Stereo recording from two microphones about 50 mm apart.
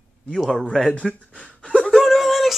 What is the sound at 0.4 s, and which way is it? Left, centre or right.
Speech, centre.